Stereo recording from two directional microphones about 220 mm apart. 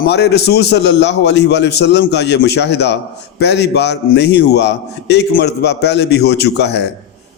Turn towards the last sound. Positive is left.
turn(degrees=50)  # may be behind; listen again after turning